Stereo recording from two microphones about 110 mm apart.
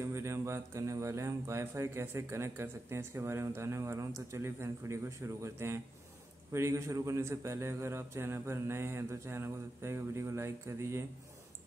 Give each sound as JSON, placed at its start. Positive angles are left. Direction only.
{"t": 0.0, "sound": "a man's voice", "side_deg": -25}